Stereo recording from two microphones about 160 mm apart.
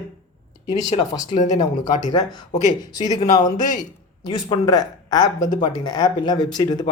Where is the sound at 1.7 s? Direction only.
55° left (ahead or behind).